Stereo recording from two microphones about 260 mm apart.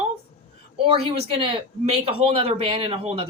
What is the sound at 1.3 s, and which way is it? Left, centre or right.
Speech, right.